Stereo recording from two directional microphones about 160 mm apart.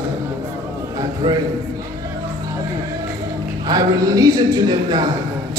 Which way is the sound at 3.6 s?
25° right (ahead or behind).